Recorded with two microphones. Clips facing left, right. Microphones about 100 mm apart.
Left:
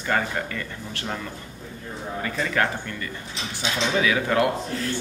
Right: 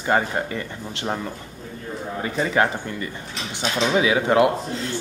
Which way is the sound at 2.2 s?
20° right (ahead or behind).